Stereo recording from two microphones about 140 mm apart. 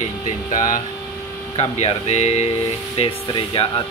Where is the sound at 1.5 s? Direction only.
40° left (ahead or behind).